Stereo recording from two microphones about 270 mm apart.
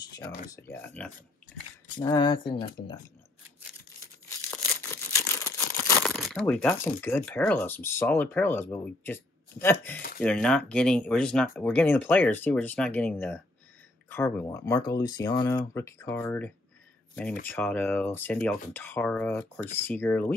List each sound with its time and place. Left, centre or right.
0.0 s speech: centre
4.5 s tearing: centre
10.2 s speech: centre